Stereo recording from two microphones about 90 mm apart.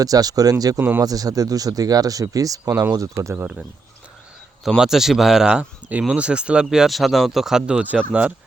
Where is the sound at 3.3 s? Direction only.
20° right (ahead or behind).